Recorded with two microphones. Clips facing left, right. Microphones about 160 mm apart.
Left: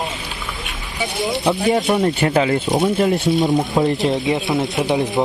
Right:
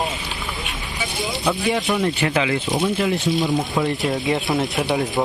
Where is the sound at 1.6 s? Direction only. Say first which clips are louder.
Left 5 dB; 40° left (ahead or behind).